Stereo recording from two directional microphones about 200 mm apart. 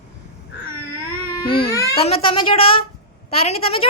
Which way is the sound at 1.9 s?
30° left (ahead or behind).